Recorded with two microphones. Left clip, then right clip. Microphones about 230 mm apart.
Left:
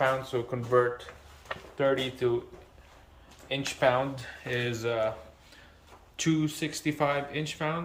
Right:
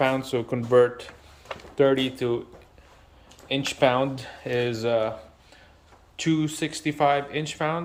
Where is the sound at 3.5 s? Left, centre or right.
Right.